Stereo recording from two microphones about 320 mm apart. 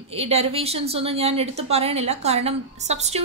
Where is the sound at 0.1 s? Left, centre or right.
Centre.